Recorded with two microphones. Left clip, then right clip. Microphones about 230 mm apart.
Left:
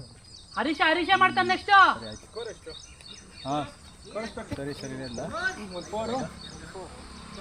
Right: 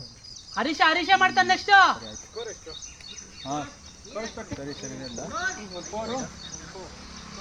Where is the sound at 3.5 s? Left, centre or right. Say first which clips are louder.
Left 2 dB; left.